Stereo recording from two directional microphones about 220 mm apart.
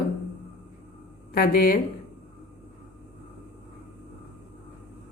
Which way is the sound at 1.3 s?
40° left (ahead or behind).